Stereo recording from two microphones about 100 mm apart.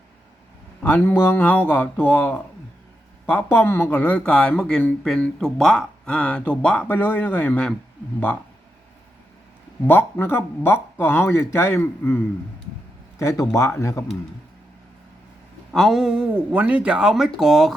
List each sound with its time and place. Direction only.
0.8 s speech: 15° left (ahead or behind)
9.8 s speech: 20° left (ahead or behind)
15.7 s speech: centre (ahead or behind)